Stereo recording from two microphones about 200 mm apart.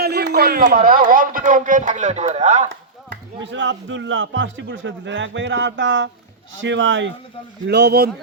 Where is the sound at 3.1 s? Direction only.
65° right (ahead or behind).